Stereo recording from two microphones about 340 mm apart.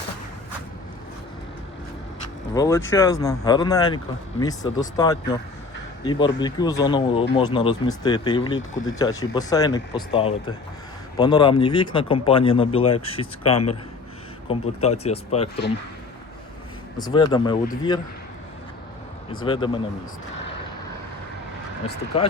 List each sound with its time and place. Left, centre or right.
2.6 s speech: centre
17.0 s speech: centre
19.3 s speech: centre
22.1 s speech: centre